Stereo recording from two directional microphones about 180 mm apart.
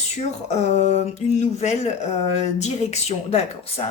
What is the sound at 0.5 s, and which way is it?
Speech, 40° left (ahead or behind).